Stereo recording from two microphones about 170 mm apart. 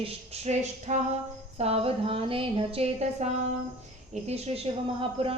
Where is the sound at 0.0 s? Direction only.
40° right (ahead or behind).